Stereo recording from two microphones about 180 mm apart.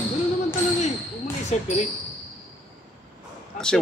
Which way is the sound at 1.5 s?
40° left (ahead or behind).